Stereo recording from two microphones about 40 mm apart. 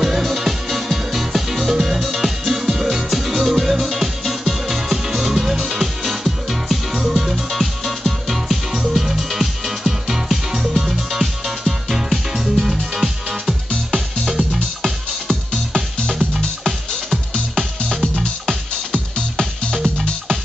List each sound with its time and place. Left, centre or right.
0.0 s music: centre
14.8 s music: centre
18.2 s music: left